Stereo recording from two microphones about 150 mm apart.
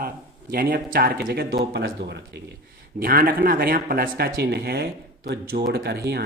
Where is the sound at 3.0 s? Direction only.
75° right (ahead or behind).